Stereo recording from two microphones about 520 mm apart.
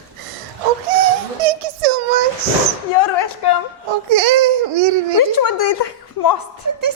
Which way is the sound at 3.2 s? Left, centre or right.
Left.